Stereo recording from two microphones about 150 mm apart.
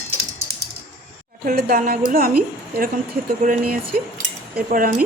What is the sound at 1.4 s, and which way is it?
Speech, 85° right.